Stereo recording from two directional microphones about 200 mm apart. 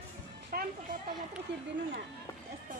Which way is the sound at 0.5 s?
45° right (ahead or behind).